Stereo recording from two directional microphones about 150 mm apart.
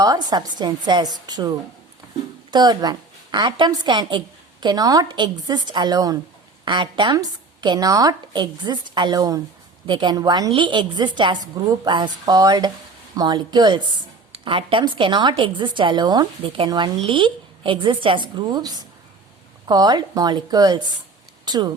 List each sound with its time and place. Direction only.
0.0 s a woman's voice: 25° right (ahead or behind)